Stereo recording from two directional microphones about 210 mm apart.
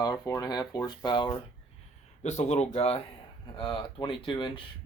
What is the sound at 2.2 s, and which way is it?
Speech, 30° left (ahead or behind).